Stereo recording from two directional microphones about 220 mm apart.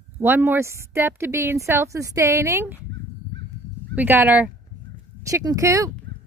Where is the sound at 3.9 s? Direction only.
10° right (ahead or behind).